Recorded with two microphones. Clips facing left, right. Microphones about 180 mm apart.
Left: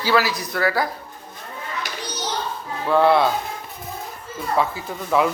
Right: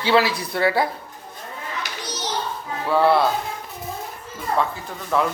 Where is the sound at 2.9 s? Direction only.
5° right (ahead or behind).